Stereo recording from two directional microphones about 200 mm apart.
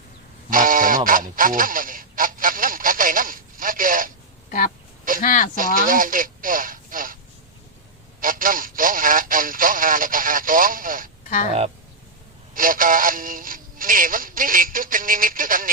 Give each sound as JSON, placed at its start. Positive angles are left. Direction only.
{"t": 0.5, "sound": "honk", "side_deg": -45}
{"t": 4.4, "sound": "duck", "side_deg": 45}
{"t": 5.2, "sound": "speech", "side_deg": 40}
{"t": 5.5, "sound": "speech", "side_deg": -45}
{"t": 8.2, "sound": "speech", "side_deg": -45}
{"t": 12.5, "sound": "speech", "side_deg": -45}